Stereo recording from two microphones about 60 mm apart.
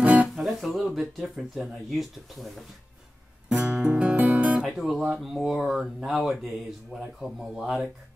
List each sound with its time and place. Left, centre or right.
0.0 s guitar: right
0.4 s speech: centre
3.5 s guitar: right
4.7 s speech: centre